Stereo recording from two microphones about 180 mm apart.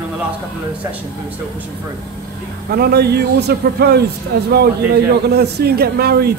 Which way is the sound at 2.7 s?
60° right (ahead or behind).